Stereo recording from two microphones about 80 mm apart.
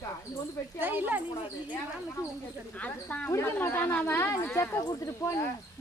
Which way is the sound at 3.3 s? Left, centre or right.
Left.